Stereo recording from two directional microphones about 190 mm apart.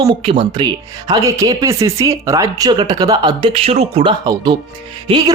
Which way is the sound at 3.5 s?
30° right (ahead or behind).